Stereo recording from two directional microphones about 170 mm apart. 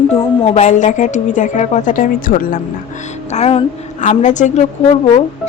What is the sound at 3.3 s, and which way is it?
A woman's voice, 40° left (ahead or behind).